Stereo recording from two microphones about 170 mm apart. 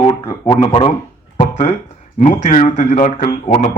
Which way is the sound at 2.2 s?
45° left (ahead or behind).